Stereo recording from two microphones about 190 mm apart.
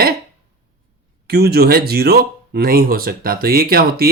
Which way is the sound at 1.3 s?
55° right (ahead or behind).